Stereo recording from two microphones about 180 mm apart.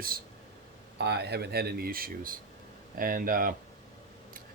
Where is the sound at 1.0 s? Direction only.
65° right (ahead or behind).